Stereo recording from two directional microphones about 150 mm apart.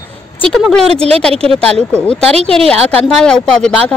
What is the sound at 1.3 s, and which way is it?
Speech, 40° right (ahead or behind).